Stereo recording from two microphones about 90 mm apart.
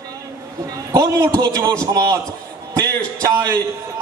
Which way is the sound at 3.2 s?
35° right (ahead or behind).